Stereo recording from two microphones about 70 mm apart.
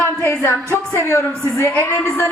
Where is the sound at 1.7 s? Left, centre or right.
Left.